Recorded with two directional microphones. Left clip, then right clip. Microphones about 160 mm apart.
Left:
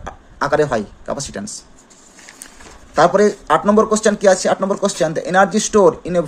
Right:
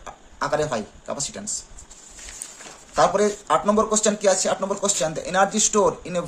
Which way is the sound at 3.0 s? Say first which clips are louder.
Left 6 dB; 40° left (ahead or behind).